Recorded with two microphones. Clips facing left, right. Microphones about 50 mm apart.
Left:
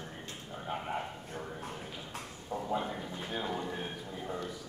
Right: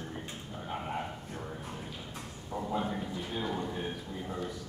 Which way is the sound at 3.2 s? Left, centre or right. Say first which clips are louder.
Right 1 dB; centre.